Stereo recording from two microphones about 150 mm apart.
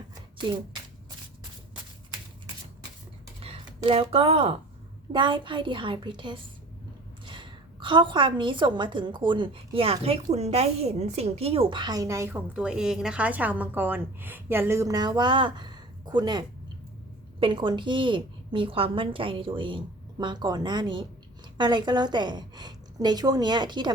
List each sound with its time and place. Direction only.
0.4 s a woman's voice: 30° right (ahead or behind)
3.4 s a woman's voice: 40° right (ahead or behind); by 12.4 s 20° right (ahead or behind)
12.5 s a woman's voice: 5° right (ahead or behind); by 16.4 s 30° right (ahead or behind)
17.4 s a woman's voice: 30° right (ahead or behind)